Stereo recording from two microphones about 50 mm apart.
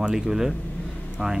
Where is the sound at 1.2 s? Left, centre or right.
Right.